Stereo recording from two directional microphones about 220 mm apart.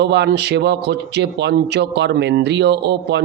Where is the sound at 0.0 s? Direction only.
50° right (ahead or behind).